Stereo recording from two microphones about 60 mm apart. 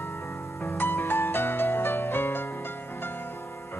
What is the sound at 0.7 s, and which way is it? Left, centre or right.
Music, left.